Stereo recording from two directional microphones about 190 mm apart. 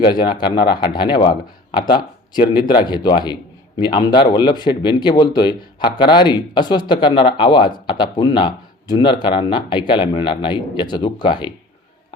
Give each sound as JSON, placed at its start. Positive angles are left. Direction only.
{"t": 0.0, "sound": "speech", "side_deg": 25}